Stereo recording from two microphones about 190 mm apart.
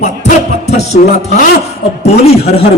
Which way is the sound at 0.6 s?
35° left (ahead or behind).